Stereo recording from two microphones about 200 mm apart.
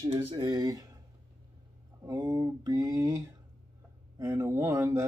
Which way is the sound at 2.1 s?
20° right (ahead or behind).